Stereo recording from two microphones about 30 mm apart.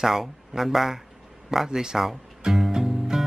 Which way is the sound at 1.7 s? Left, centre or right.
Right.